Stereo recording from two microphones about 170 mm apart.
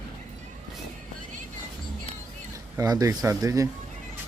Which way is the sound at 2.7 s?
20° right (ahead or behind).